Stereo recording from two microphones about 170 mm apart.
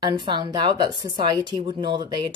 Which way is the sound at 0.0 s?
25° right (ahead or behind).